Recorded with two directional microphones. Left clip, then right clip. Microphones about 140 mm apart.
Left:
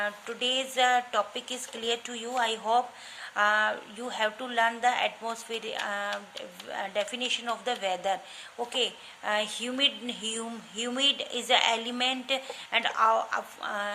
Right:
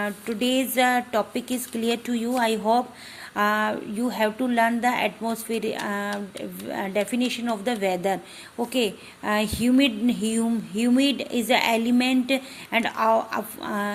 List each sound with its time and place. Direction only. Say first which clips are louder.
0.0 s a woman's voice: right 4 dB; 30° right (ahead or behind)